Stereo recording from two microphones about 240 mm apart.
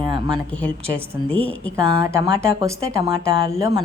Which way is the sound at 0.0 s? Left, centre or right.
Centre.